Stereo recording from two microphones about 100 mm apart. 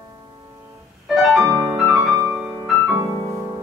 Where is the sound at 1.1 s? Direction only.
Centre (ahead or behind).